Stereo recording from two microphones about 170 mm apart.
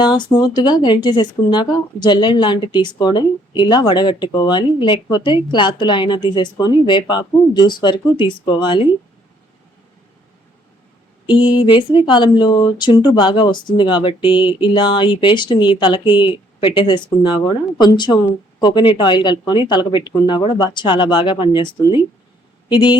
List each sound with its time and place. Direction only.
0.0 s speech: 25° left (ahead or behind)
11.3 s speech: 30° left (ahead or behind)